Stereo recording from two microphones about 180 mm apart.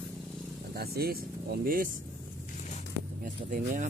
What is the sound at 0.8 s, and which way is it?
Speech, 60° right (ahead or behind).